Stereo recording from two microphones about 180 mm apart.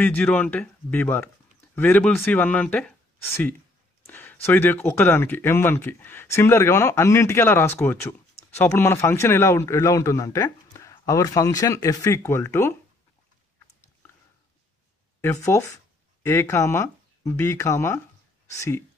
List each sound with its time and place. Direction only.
0.0 s speech: 10° left (ahead or behind)
15.2 s speech: 15° left (ahead or behind)